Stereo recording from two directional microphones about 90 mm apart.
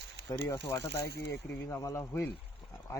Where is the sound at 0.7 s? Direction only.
30° left (ahead or behind).